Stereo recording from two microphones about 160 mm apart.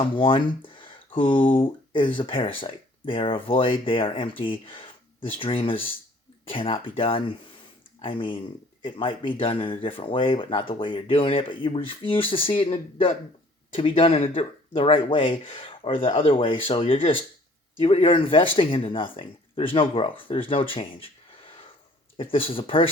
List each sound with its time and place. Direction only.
0.0 s speech: 30° left (ahead or behind)
22.2 s speech: 35° left (ahead or behind)